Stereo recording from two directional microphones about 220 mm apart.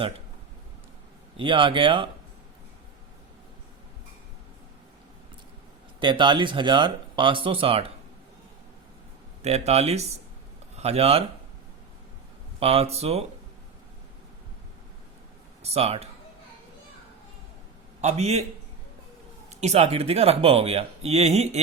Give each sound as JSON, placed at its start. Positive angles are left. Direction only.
{"t": 1.4, "sound": "speech", "side_deg": -25}
{"t": 6.0, "sound": "speech", "side_deg": -20}
{"t": 9.4, "sound": "speech", "side_deg": -30}
{"t": 12.5, "sound": "speech", "side_deg": -25}
{"t": 15.6, "sound": "speech", "side_deg": -30}
{"t": 18.0, "sound": "speech", "side_deg": -30}
{"t": 19.5, "sound": "speech", "side_deg": -30}